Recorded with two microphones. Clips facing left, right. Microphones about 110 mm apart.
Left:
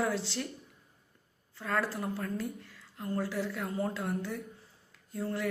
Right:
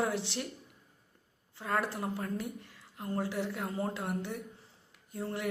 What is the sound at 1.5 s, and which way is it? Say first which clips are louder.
A woman's voice: even; 20° right (ahead or behind).